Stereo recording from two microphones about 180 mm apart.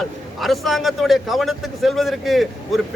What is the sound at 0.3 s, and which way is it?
A man's voice, centre (ahead or behind).